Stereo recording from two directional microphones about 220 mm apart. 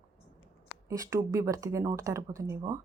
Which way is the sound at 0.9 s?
15° right (ahead or behind).